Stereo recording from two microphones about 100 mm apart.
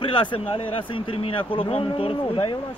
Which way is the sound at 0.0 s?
55° left (ahead or behind).